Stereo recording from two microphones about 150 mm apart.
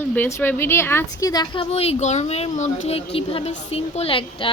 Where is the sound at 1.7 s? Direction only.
40° left (ahead or behind).